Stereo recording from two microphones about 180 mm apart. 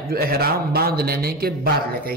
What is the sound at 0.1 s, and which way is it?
A man's voice, 60° right (ahead or behind).